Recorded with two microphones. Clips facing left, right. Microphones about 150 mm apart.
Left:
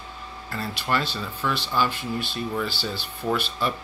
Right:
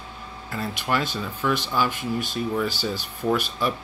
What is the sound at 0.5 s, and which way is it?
Speech, 10° right (ahead or behind).